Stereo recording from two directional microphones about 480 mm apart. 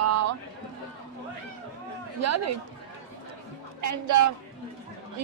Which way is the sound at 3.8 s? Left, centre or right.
Right.